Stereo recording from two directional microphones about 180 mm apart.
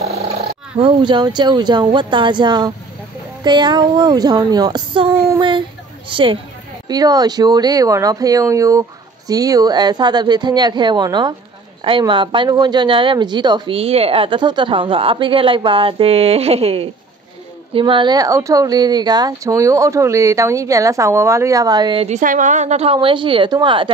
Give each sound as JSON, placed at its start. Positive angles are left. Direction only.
{"t": 0.7, "sound": "speech", "side_deg": -25}
{"t": 5.4, "sound": "a sound", "side_deg": -30}
{"t": 6.9, "sound": "a woman's voice", "side_deg": -20}
{"t": 22.0, "sound": "a woman's voice", "side_deg": -45}